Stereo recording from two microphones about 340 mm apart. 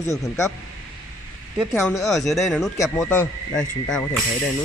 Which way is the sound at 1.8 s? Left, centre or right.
Centre.